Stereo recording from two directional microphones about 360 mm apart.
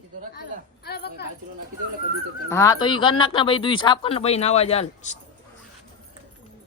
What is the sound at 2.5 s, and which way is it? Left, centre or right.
Speech, centre.